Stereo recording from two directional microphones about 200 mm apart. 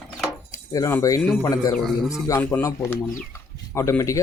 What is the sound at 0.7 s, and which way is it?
Speech, 15° left (ahead or behind).